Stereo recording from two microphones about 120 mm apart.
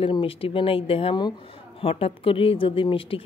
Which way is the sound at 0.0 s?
50° left (ahead or behind).